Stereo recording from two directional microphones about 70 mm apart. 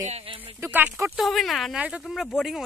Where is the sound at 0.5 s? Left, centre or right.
Right.